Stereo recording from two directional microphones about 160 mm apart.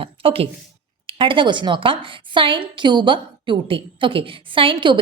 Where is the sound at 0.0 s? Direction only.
35° right (ahead or behind).